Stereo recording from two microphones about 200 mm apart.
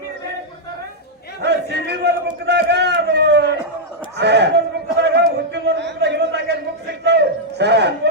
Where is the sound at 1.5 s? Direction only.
55° right (ahead or behind).